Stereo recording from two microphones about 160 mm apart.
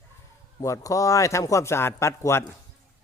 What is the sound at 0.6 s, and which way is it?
A man's voice, 20° left (ahead or behind).